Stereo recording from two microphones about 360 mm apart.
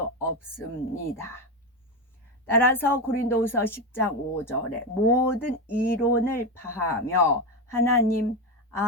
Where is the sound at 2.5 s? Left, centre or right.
Centre.